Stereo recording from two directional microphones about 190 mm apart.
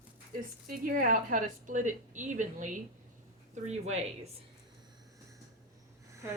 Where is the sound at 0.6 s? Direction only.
45° right (ahead or behind).